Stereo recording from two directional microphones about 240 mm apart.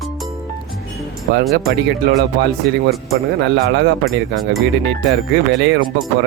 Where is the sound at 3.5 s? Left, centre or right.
Right.